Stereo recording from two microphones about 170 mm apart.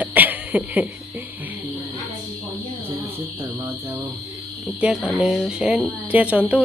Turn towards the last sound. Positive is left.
turn(degrees=-10)  # may be behind; listen again after turning